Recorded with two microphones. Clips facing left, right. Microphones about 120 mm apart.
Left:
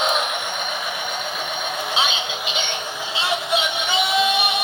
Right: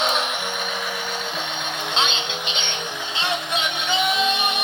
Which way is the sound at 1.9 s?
5° left (ahead or behind).